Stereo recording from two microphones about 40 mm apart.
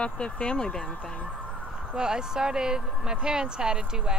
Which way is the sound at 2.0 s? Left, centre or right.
Centre.